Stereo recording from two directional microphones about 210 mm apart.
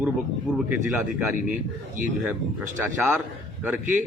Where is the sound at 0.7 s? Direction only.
5° right (ahead or behind).